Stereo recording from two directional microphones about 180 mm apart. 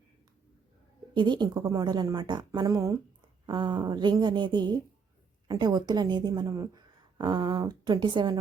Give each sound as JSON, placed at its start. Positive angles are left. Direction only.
{"t": 1.1, "sound": "a woman's voice", "side_deg": -25}